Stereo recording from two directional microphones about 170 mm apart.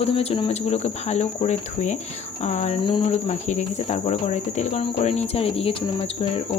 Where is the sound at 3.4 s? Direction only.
45° left (ahead or behind).